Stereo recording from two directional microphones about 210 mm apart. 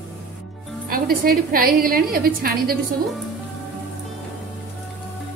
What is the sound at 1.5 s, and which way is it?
A woman's voice, 45° right (ahead or behind).